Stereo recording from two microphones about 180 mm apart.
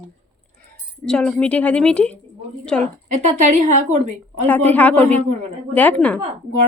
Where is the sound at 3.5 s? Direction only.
45° right (ahead or behind).